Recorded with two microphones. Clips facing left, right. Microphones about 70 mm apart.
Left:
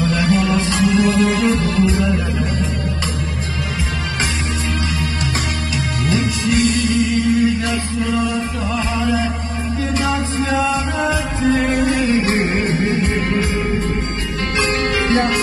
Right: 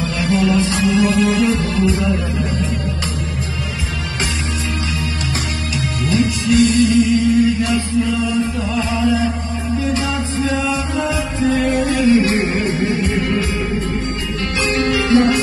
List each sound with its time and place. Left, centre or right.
0.0 s music: left
6.0 s music: left
10.0 s music: left
15.0 s music: left